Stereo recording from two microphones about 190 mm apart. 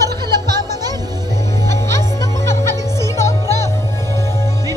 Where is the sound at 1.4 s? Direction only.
15° left (ahead or behind).